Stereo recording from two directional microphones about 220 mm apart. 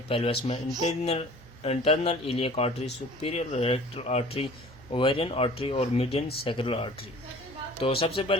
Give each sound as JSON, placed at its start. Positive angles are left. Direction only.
{"t": 0.1, "sound": "speech", "side_deg": 25}